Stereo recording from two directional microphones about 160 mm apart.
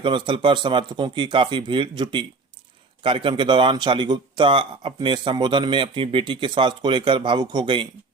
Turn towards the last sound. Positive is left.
turn(degrees=-30)  # may be behind; listen again after turning